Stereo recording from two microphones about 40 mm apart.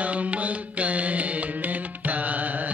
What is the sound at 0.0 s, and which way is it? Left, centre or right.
Music, right.